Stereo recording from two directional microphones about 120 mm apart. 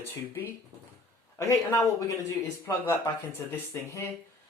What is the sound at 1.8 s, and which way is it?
Speech, 25° left (ahead or behind).